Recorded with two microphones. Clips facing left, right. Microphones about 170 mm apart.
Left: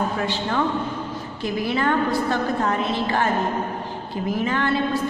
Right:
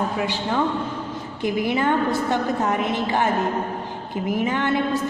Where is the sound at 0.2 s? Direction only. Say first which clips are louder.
Even; 10° right (ahead or behind).